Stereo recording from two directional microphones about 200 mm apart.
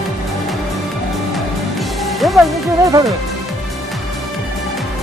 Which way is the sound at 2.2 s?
Centre (ahead or behind).